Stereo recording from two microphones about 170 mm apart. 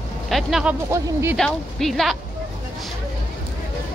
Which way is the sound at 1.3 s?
Centre (ahead or behind).